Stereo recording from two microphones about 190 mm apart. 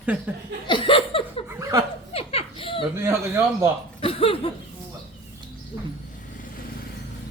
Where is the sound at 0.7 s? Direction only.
25° left (ahead or behind).